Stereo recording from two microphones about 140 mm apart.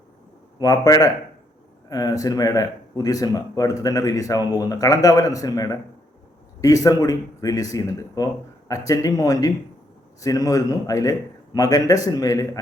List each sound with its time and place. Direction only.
0.6 s speech: 25° left (ahead or behind)